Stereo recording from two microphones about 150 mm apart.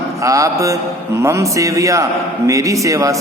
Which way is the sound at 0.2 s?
20° right (ahead or behind).